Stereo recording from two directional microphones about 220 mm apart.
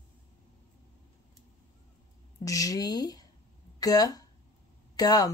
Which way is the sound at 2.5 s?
15° left (ahead or behind).